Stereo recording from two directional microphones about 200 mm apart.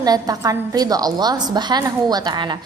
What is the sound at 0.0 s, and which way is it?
A woman's voice, 20° right (ahead or behind).